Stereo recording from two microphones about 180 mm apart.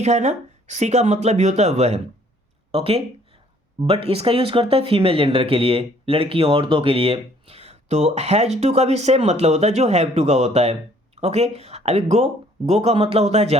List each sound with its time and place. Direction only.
0.0 s speech: 40° right (ahead or behind)